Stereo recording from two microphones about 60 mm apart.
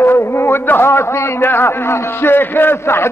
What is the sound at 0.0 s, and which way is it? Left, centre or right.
A man's voice, left.